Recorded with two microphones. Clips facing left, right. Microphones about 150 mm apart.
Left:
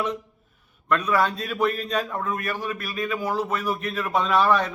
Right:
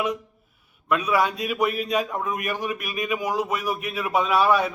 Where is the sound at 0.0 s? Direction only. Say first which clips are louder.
Right 1 dB; 10° right (ahead or behind).